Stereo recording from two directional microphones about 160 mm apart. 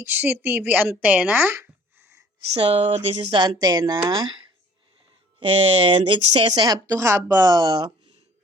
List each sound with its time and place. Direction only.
0.0 s a woman's voice: 15° right (ahead or behind)
2.6 s speech: 35° right (ahead or behind)
6.6 s a woman's voice: 25° right (ahead or behind)